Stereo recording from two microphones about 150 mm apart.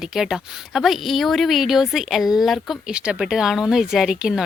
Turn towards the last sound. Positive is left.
turn(degrees=-5)  # may be behind; listen again after turning